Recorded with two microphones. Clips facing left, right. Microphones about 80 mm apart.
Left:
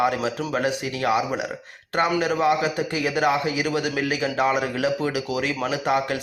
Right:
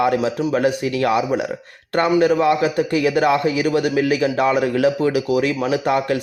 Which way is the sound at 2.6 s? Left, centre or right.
Right.